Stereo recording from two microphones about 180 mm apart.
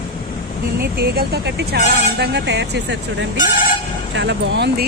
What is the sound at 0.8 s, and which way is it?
Speech, 60° right (ahead or behind).